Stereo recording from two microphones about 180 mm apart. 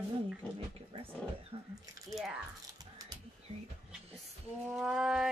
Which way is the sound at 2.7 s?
20° right (ahead or behind).